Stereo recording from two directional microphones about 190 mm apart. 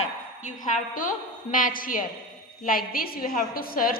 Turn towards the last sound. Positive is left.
turn(degrees=50)  # may be behind; listen again after turning